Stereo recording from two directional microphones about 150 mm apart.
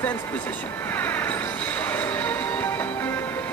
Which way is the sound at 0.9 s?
10° left (ahead or behind).